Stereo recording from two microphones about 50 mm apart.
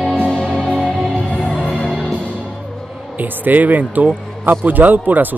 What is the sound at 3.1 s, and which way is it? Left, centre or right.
Speech, right.